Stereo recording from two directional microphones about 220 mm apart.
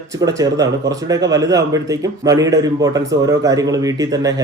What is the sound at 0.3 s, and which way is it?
Speech, 15° right (ahead or behind).